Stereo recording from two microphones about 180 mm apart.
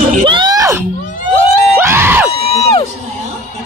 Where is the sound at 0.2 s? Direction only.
25° right (ahead or behind).